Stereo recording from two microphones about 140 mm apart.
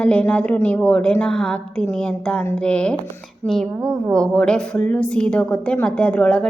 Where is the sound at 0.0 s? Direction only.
10° left (ahead or behind).